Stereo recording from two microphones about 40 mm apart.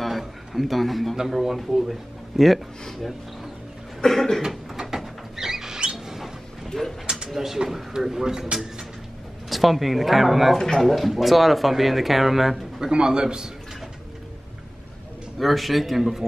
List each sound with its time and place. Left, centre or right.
0.0 s a sound: centre
1.1 s speech: centre
4.0 s cough: centre
4.5 s rodents: centre
5.9 s a sound: centre
7.2 s speech: centre
9.5 s speech: centre
12.9 s a man's voice: centre
15.3 s speech: centre